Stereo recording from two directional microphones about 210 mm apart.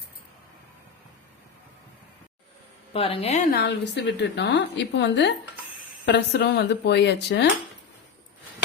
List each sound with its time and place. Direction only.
2.9 s a woman's voice: 30° left (ahead or behind)
3.5 s a woman's voice: 50° left (ahead or behind)